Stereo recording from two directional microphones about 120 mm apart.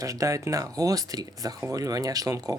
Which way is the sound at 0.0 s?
25° right (ahead or behind).